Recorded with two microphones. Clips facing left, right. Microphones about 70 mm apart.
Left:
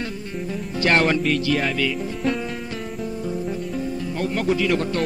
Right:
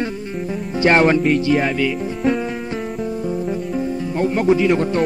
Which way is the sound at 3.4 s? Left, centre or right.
Right.